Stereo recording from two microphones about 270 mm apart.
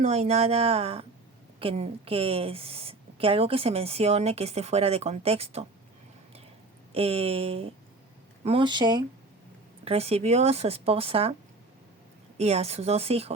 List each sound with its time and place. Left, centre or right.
0.0 s a woman's voice: right
6.9 s a woman's voice: right
12.4 s a woman's voice: right